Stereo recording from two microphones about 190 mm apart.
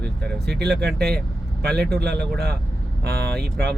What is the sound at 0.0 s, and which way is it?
Speech, 60° right (ahead or behind).